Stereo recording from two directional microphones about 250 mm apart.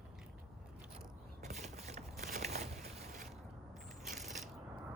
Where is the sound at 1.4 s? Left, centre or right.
Right.